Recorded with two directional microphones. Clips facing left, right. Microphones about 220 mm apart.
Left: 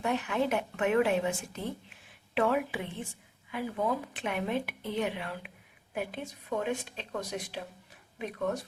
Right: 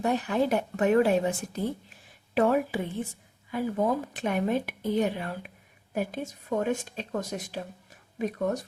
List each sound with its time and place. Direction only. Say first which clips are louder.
0.0 s a woman's voice: right 4 dB; 40° right (ahead or behind)